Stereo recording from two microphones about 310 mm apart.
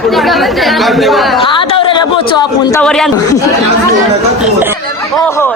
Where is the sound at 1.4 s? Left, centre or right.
Centre.